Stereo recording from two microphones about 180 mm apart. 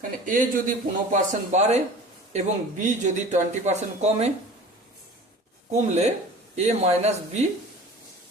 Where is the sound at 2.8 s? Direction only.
40° right (ahead or behind).